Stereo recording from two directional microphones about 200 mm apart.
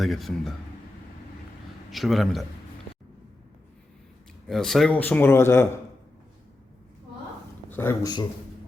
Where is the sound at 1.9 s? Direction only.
Centre (ahead or behind).